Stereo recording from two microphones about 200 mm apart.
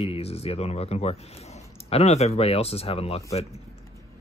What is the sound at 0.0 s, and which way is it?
Speech, 30° left (ahead or behind).